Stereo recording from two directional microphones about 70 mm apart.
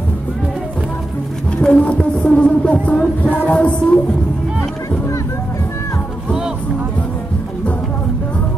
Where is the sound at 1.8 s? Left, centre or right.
Centre.